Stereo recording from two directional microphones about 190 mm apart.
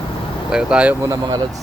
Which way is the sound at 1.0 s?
15° right (ahead or behind).